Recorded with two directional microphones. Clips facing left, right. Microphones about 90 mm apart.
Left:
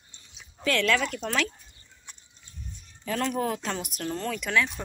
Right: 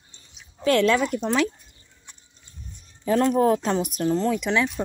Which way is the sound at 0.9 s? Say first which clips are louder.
Right 5 dB; 20° right (ahead or behind).